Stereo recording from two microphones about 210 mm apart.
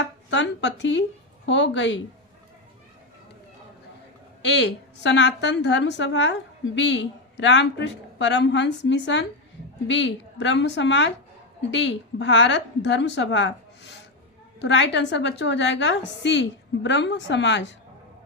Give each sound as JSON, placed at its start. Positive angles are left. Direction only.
{"t": 0.3, "sound": "a woman's voice", "side_deg": 60}
{"t": 4.4, "sound": "a woman's voice", "side_deg": 55}